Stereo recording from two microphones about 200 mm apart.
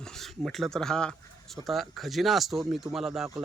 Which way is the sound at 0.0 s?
Centre (ahead or behind).